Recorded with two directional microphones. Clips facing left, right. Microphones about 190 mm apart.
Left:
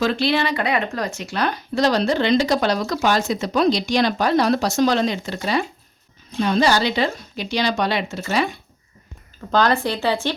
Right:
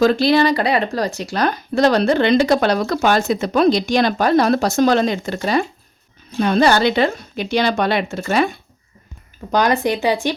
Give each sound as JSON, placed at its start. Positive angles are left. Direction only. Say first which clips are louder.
{"t": 0.0, "sound": "speech", "louder": "right 6 dB", "side_deg": -40}
{"t": 9.5, "sound": "speech", "louder": "right 2 dB", "side_deg": -15}